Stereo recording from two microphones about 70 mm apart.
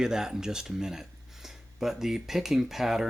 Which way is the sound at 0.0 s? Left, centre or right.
Centre.